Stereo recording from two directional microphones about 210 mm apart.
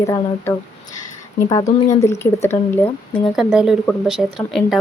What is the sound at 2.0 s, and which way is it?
Speech, 15° left (ahead or behind).